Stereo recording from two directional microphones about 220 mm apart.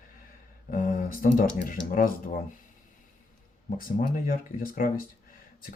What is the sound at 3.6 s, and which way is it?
Speech, 40° left (ahead or behind).